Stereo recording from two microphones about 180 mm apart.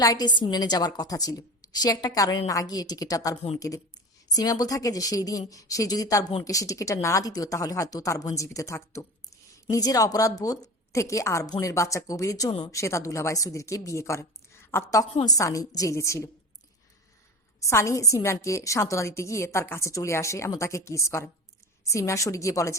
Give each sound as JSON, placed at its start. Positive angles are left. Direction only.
{"t": 0.0, "sound": "a woman's voice", "side_deg": 20}
{"t": 4.4, "sound": "a woman's voice", "side_deg": 20}
{"t": 12.7, "sound": "a woman's voice", "side_deg": 15}
{"t": 17.6, "sound": "a woman's voice", "side_deg": 15}